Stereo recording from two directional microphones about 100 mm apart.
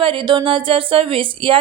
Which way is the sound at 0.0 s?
60° right (ahead or behind).